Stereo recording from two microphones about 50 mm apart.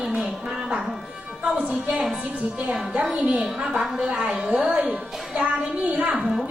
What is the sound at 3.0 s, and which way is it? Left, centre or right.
A woman's voice, centre.